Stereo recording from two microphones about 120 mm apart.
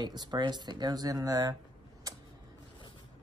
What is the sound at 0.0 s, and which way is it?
Speech, 35° right (ahead or behind).